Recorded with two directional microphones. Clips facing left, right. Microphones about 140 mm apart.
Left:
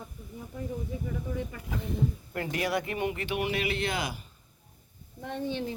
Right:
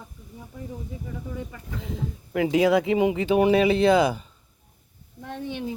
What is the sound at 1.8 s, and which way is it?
Speech, 90° right.